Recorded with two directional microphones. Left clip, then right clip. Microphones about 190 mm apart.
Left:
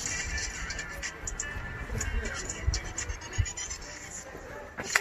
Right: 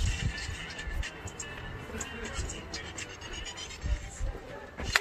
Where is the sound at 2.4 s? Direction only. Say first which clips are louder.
Left 3 dB; 15° right (ahead or behind).